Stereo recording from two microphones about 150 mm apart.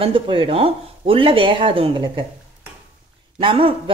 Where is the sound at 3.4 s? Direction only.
40° right (ahead or behind).